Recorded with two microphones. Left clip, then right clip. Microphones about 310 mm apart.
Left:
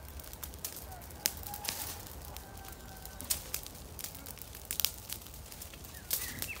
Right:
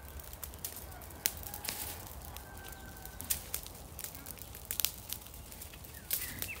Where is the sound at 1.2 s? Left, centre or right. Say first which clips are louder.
Left 2 dB; centre.